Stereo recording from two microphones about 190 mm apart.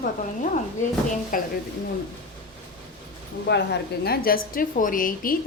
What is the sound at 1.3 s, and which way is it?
Speech, 45° left (ahead or behind).